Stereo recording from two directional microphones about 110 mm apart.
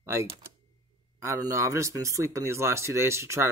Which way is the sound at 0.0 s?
25° right (ahead or behind).